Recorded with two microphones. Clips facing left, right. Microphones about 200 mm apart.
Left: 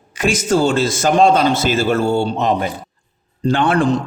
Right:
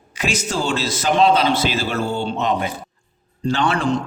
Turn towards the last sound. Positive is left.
turn(degrees=55)  # may be behind; listen again after turning